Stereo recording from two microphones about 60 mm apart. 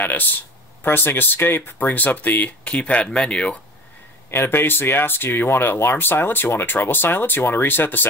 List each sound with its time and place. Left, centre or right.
0.0 s speech: left
4.3 s speech: left